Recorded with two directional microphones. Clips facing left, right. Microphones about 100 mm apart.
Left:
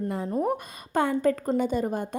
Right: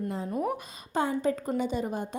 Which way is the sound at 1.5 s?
50° left (ahead or behind).